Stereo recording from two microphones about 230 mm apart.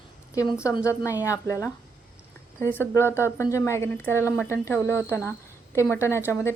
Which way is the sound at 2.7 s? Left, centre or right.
Centre.